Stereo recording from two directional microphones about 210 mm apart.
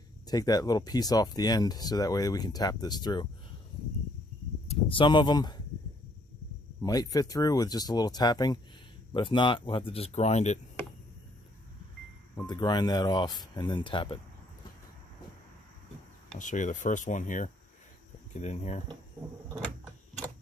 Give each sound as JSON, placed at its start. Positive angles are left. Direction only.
{"t": 0.3, "sound": "speech", "side_deg": 20}
{"t": 4.7, "sound": "speech", "side_deg": 25}
{"t": 6.8, "sound": "speech", "side_deg": 15}
{"t": 12.4, "sound": "speech", "side_deg": 20}
{"t": 16.4, "sound": "speech", "side_deg": 35}